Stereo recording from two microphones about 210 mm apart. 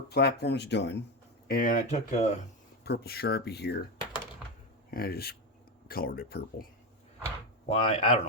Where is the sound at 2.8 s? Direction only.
50° left (ahead or behind).